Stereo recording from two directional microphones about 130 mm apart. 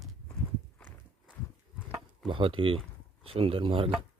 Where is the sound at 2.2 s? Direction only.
40° right (ahead or behind).